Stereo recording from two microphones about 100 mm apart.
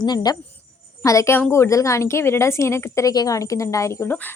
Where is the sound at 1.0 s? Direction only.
30° left (ahead or behind).